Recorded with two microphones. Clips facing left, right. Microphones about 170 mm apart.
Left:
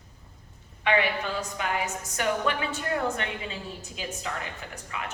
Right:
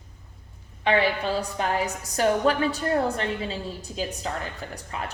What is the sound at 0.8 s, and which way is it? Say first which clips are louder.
A woman's voice: right 3 dB; 30° right (ahead or behind).